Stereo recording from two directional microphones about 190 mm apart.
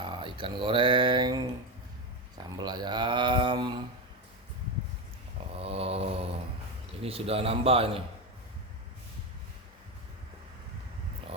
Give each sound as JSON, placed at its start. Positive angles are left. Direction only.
{"t": 0.0, "sound": "speech", "side_deg": -25}
{"t": 2.5, "sound": "speech", "side_deg": -20}
{"t": 5.6, "sound": "mantra", "side_deg": -30}
{"t": 7.0, "sound": "a man's voice", "side_deg": -30}